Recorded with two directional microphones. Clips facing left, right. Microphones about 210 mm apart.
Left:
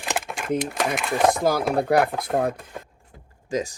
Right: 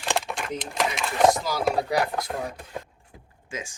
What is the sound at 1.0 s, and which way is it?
Speech, centre (ahead or behind).